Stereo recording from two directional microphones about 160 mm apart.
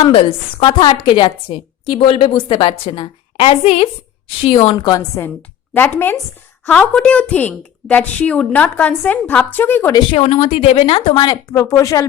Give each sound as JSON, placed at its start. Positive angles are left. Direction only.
{"t": 0.0, "sound": "a woman's voice", "side_deg": 35}
{"t": 10.1, "sound": "speech", "side_deg": 35}